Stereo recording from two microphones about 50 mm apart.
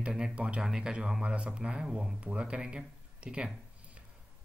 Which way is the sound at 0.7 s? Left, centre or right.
Centre.